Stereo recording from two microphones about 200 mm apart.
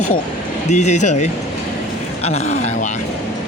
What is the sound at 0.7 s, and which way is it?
Speech, 35° left (ahead or behind).